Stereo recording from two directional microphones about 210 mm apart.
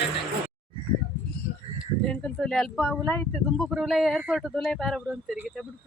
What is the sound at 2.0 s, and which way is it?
Speech, 5° left (ahead or behind).